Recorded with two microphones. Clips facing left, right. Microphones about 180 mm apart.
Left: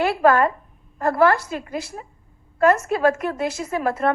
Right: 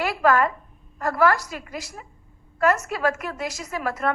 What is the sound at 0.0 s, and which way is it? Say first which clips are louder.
A woman's voice: left 3 dB; 30° left (ahead or behind).